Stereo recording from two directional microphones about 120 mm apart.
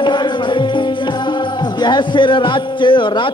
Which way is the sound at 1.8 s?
40° left (ahead or behind).